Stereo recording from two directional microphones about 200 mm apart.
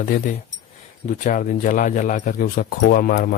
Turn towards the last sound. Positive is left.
turn(degrees=45)  # may be behind; listen again after turning